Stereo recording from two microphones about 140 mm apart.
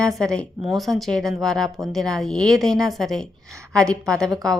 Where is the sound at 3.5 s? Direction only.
20° right (ahead or behind).